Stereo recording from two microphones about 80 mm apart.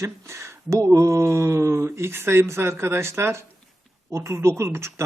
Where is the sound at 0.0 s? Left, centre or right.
Right.